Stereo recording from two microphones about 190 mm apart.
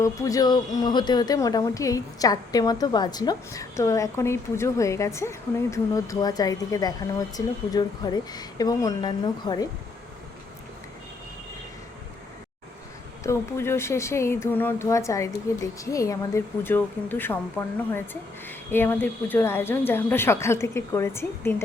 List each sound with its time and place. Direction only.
0.0 s a woman's voice: 15° left (ahead or behind)
13.2 s speech: 15° left (ahead or behind)